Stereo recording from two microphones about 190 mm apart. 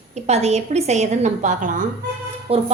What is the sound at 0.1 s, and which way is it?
A woman's voice, 35° right (ahead or behind).